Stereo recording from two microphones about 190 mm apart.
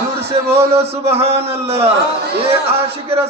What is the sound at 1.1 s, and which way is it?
Speech, 30° right (ahead or behind).